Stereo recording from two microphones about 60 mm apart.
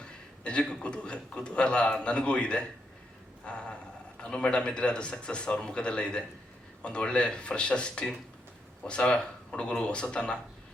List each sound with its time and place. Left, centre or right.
0.0 s a man's voice: centre